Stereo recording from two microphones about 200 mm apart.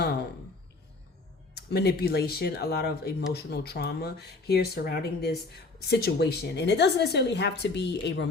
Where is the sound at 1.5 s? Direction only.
55° left (ahead or behind).